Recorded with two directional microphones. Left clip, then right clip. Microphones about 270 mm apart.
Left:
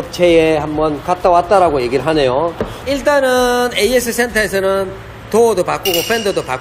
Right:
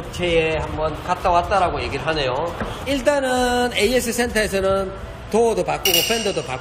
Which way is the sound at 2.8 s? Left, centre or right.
Centre.